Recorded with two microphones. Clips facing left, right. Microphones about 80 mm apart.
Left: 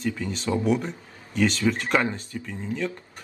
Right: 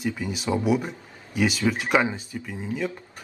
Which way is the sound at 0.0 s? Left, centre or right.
Centre.